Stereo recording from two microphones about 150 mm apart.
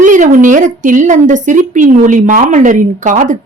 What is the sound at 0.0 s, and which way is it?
A woman's voice, 55° right (ahead or behind).